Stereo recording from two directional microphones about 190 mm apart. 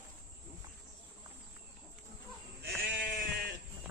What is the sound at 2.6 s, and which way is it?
Sheep, 50° right (ahead or behind).